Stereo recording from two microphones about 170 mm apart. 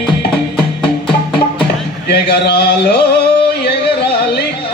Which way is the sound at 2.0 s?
70° left (ahead or behind).